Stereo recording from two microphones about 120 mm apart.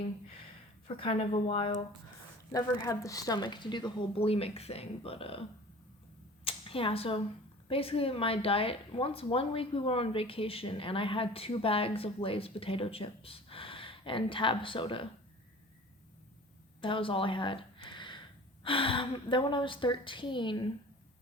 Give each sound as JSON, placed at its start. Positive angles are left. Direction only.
{"t": 0.9, "sound": "speech", "side_deg": 50}
{"t": 2.5, "sound": "speech", "side_deg": 30}
{"t": 6.4, "sound": "a sound", "side_deg": 50}
{"t": 7.7, "sound": "speech", "side_deg": 50}
{"t": 16.8, "sound": "speech", "side_deg": 45}